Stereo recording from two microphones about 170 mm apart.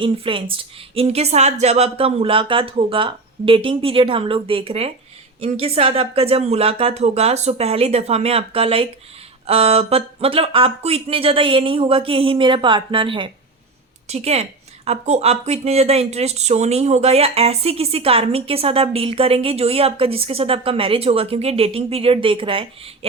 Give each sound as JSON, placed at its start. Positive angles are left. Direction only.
{"t": 0.0, "sound": "speech", "side_deg": -30}